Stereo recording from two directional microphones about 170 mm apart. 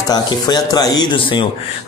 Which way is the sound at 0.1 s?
25° left (ahead or behind).